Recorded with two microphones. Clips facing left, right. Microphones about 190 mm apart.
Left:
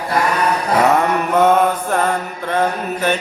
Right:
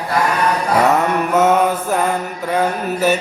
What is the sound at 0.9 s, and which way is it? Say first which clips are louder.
Mantra: even; 5° right (ahead or behind).